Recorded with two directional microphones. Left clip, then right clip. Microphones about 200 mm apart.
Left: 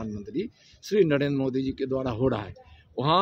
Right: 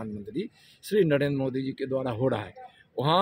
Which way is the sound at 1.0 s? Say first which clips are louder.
Left 1 dB; 30° left (ahead or behind).